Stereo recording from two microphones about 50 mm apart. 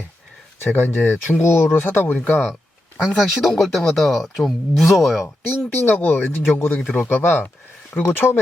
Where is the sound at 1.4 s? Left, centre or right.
Left.